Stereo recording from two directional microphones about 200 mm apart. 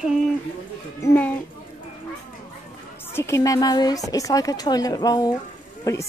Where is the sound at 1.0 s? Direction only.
10° left (ahead or behind).